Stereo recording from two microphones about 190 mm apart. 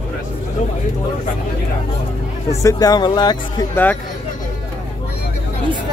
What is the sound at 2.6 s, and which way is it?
Speech, 15° left (ahead or behind).